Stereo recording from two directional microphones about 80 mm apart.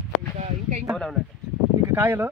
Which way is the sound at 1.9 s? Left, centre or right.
Right.